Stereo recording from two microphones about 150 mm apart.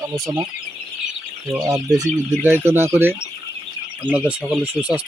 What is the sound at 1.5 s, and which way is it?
Speech, 20° right (ahead or behind).